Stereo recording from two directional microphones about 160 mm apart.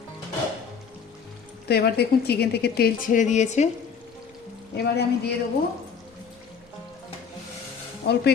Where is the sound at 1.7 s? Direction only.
85° left; by 3.7 s 45° left (ahead or behind).